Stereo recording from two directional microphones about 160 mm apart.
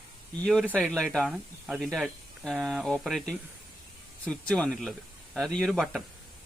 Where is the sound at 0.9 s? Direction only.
5° left (ahead or behind).